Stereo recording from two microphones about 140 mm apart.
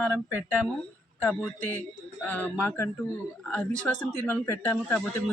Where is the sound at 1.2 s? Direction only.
Centre (ahead or behind).